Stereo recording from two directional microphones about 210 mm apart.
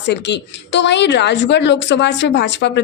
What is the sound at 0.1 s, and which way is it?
A woman's voice, 55° left (ahead or behind).